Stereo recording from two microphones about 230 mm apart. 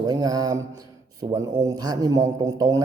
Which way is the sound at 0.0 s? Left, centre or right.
Centre.